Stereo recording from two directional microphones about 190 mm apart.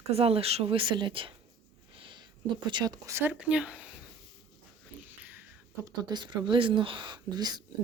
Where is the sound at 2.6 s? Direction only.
20° right (ahead or behind); by 3.8 s 5° right (ahead or behind).